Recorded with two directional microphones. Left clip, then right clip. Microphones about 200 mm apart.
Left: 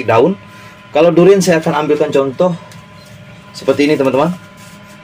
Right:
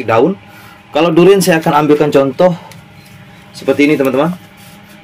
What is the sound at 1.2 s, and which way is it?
Speech, 25° right (ahead or behind).